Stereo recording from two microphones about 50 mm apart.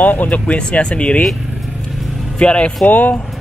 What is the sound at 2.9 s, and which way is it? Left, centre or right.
Speech, left.